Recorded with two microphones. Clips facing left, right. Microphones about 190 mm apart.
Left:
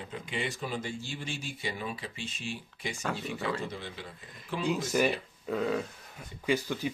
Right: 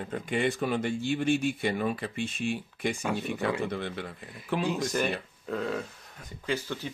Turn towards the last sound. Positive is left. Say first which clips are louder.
# left 3 dB
turn(degrees=15)  # may be behind; listen again after turning